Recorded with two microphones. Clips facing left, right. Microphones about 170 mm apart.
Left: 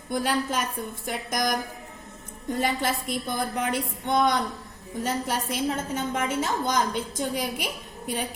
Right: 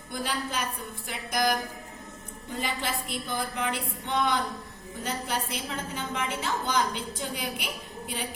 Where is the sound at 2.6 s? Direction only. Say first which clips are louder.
Left 5 dB; 45° left (ahead or behind).